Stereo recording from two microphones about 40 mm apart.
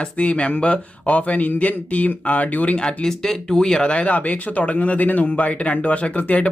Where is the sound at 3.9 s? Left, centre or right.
Left.